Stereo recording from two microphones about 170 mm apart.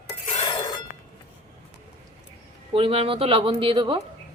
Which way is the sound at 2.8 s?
35° right (ahead or behind).